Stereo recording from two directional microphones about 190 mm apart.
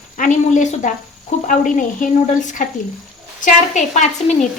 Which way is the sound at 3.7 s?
40° left (ahead or behind).